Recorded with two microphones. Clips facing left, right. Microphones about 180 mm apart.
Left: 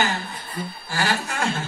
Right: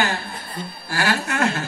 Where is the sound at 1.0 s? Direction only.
60° right (ahead or behind).